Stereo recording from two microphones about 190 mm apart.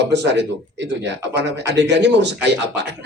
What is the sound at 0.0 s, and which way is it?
Speech, 65° right (ahead or behind).